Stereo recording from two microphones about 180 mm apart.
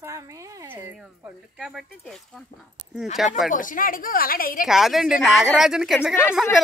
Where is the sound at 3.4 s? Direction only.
50° left (ahead or behind).